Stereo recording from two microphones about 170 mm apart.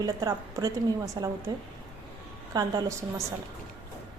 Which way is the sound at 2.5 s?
25° right (ahead or behind).